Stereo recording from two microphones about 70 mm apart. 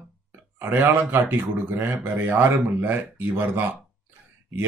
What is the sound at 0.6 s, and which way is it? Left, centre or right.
Speech, right.